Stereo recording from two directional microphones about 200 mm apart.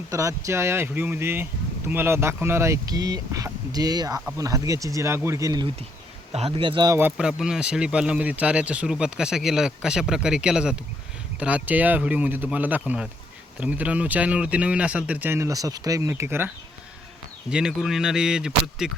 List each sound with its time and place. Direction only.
0.1 s speech: 15° right (ahead or behind)
17.5 s speech: 5° right (ahead or behind)